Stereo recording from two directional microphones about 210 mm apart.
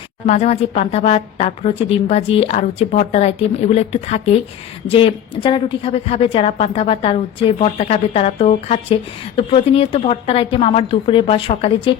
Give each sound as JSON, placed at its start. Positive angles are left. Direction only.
{"t": 0.3, "sound": "a woman's voice", "side_deg": 30}